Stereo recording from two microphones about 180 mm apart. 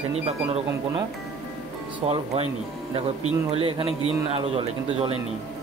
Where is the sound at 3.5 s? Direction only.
30° right (ahead or behind).